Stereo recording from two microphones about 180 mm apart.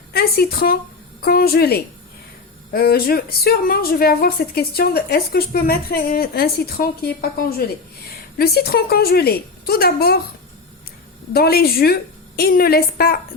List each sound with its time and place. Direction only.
0.1 s speech: 55° left (ahead or behind)
11.3 s speech: 60° left (ahead or behind)